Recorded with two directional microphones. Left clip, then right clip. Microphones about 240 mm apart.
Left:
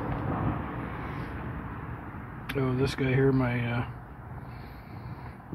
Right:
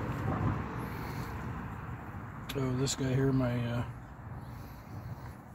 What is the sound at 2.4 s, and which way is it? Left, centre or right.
Speech, centre.